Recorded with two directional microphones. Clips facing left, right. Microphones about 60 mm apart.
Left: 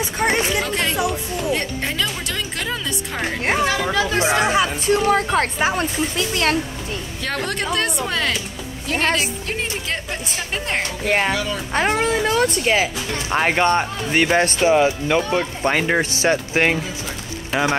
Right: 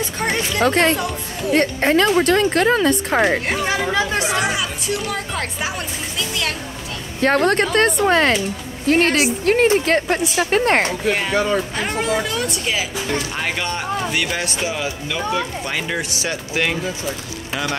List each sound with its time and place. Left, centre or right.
0.0 s a sound: centre
0.6 s speech: right
3.6 s speech: centre
4.2 s speech: left
7.2 s speech: right
11.1 s speech: left
11.3 s speech: right
11.7 s speech: left